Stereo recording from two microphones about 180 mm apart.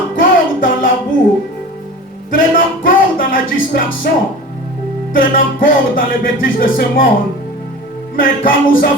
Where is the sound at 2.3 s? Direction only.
50° left (ahead or behind).